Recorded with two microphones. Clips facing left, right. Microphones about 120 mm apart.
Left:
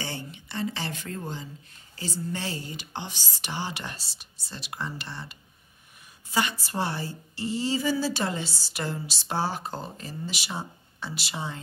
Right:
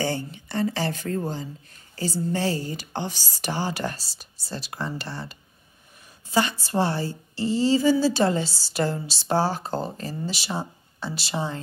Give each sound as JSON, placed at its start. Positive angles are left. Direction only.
{"t": 0.0, "sound": "a woman's voice", "side_deg": -40}
{"t": 6.6, "sound": "a woman's voice", "side_deg": -30}